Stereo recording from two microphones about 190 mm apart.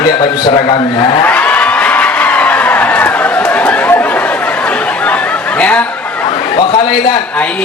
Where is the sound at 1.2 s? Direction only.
10° left (ahead or behind).